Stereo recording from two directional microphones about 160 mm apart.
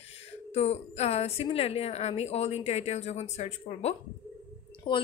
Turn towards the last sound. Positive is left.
turn(degrees=30)  # may be behind; listen again after turning